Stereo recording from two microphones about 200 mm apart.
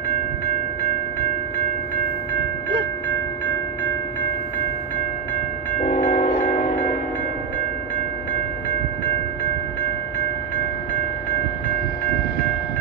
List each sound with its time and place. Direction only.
5.8 s train: 40° left (ahead or behind)